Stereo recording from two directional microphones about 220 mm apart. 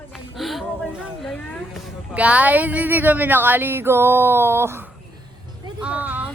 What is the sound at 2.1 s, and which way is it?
Speech, 5° right (ahead or behind).